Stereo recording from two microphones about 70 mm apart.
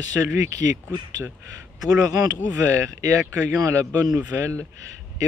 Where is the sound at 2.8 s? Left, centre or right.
Right.